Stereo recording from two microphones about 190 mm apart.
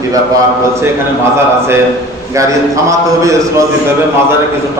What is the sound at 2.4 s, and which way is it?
A man's voice, 15° right (ahead or behind).